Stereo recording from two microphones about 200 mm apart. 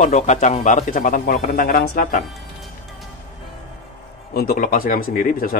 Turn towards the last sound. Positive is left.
turn(degrees=45)  # may be behind; listen again after turning